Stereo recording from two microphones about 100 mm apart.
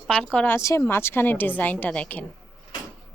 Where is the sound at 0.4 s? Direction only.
25° left (ahead or behind).